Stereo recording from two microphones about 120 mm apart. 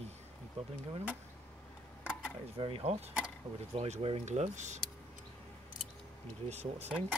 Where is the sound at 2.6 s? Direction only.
55° right (ahead or behind).